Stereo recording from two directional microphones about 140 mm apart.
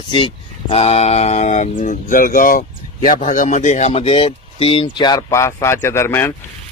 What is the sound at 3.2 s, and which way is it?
Speech, 60° left (ahead or behind).